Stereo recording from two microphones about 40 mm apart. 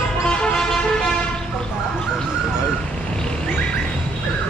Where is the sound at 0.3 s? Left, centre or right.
Left.